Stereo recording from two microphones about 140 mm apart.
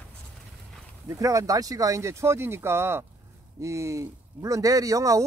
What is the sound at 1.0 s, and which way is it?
Speech, 25° right (ahead or behind).